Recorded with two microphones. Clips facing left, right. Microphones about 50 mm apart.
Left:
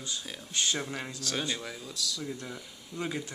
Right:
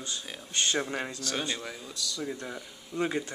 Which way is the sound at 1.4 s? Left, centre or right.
Centre.